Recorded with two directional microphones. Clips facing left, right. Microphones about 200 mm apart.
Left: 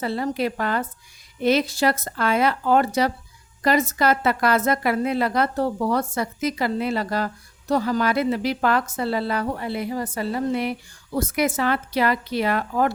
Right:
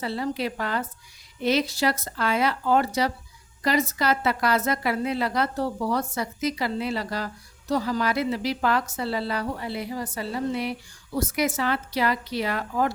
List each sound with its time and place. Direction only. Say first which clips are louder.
0.0 s a woman's voice: left 4 dB; 50° left (ahead or behind)